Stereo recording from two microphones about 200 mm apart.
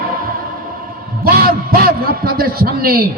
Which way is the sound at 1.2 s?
50° right (ahead or behind).